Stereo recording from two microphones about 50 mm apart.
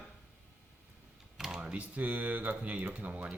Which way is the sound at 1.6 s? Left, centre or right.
Right.